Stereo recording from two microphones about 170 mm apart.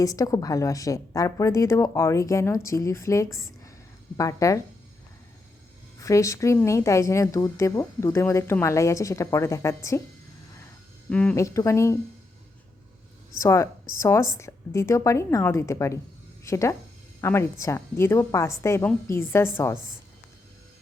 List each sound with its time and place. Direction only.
0.0 s a woman's voice: 20° left (ahead or behind)
6.0 s speech: 20° left (ahead or behind)
11.1 s speech: 5° left (ahead or behind)
11.3 s speech: 20° left (ahead or behind)
13.4 s speech: 15° left (ahead or behind)